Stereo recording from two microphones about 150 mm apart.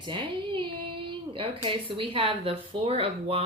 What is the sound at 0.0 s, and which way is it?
Female singing, 35° right (ahead or behind).